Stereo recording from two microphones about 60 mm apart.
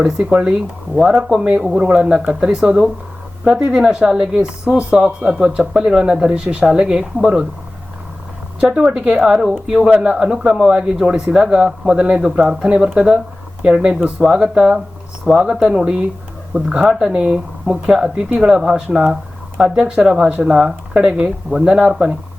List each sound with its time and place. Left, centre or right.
0.9 s speech: centre
8.7 s speech: centre
16.8 s speech: centre
17.1 s speech: centre